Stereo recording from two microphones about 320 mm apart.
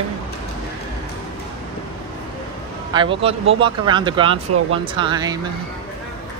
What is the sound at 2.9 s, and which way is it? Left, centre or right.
Speech, centre.